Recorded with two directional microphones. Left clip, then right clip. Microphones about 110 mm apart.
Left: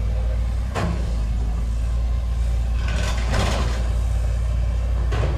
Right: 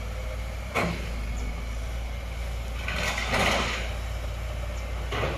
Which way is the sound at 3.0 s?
30° left (ahead or behind).